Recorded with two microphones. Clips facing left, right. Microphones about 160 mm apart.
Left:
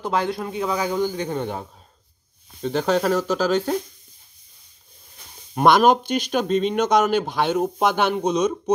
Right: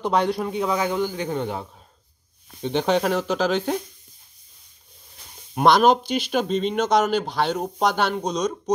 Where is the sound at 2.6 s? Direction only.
5° left (ahead or behind).